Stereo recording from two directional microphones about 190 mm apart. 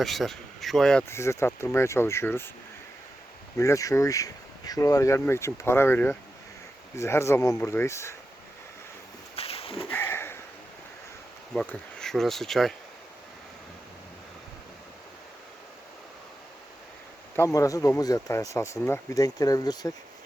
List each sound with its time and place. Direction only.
0.0 s speech: centre (ahead or behind)
1.0 s speech: 15° left (ahead or behind)
3.6 s speech: 15° left (ahead or behind)
9.3 s a sound: 30° left (ahead or behind)
9.9 s sniff: 10° left (ahead or behind)
11.5 s speech: 5° left (ahead or behind)
17.3 s speech: 15° left (ahead or behind)